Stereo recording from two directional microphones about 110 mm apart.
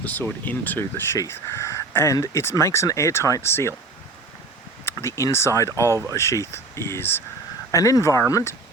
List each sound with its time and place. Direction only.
0.0 s speech: 15° left (ahead or behind)
4.9 s speech: 25° left (ahead or behind)
5.9 s speech: 30° right (ahead or behind)
6.1 s speech: 25° left (ahead or behind)